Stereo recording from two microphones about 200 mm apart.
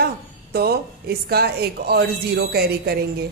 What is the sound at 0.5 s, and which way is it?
A woman's voice, 50° right (ahead or behind).